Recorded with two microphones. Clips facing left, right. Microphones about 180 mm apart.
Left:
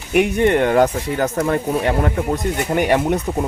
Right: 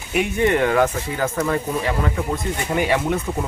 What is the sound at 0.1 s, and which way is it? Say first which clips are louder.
Speech: left 4 dB; 55° left (ahead or behind).